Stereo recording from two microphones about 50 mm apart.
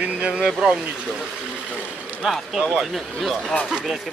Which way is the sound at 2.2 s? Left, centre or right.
Centre.